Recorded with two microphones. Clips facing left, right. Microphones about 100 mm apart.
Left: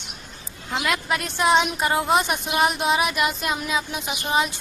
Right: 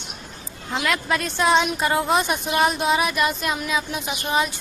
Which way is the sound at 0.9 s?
20° left (ahead or behind).